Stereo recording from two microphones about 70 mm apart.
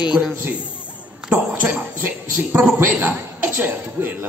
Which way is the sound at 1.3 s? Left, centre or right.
Right.